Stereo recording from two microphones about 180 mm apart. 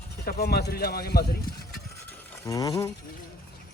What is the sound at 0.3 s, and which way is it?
Speech, 60° left (ahead or behind).